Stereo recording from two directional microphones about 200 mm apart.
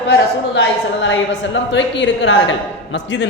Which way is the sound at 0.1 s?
60° left (ahead or behind).